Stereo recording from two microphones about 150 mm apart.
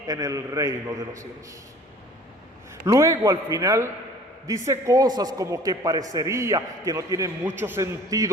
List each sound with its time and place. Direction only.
0.1 s a man's voice: 25° right (ahead or behind)
2.8 s a man's voice: 20° right (ahead or behind)